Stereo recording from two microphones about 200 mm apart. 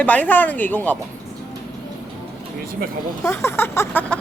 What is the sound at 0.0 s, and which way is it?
Speech, 10° left (ahead or behind).